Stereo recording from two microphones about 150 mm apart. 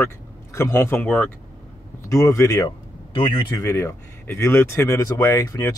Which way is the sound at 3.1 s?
35° left (ahead or behind).